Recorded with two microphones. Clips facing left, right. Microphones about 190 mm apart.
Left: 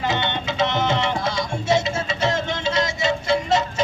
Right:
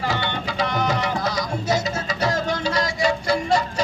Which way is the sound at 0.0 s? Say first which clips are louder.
Left 1 dB; 20° left (ahead or behind).